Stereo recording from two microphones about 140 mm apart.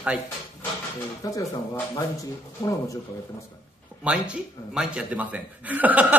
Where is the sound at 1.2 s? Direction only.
25° left (ahead or behind).